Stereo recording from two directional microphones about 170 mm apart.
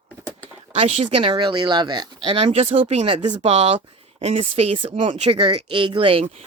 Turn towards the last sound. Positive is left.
turn(degrees=-30)  # may be behind; listen again after turning